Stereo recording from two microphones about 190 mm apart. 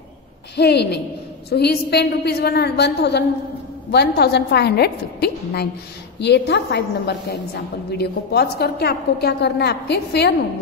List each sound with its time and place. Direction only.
0.6 s a woman's voice: 60° left (ahead or behind)